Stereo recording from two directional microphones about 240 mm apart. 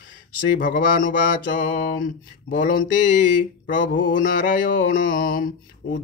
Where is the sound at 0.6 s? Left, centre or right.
Left.